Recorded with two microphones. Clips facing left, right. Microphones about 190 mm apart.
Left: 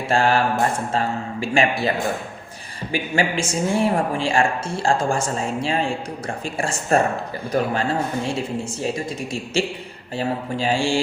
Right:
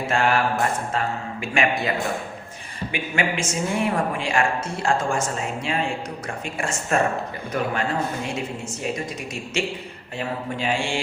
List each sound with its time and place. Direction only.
0.1 s mantra: 30° left (ahead or behind)
0.9 s a woman's voice: 30° left (ahead or behind)
2.9 s a woman's voice: 35° left (ahead or behind)
10.2 s a woman's voice: 35° left (ahead or behind)